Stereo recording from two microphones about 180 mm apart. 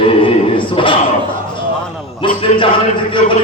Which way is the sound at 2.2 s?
25° left (ahead or behind).